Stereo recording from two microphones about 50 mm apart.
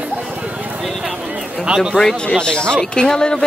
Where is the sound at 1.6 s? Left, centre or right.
Centre.